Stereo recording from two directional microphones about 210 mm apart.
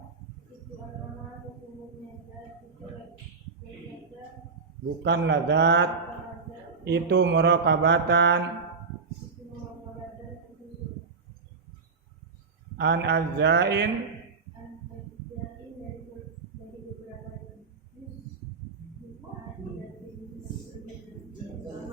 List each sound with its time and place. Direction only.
5.0 s speech: 55° right (ahead or behind)
12.7 s speech: 50° right (ahead or behind)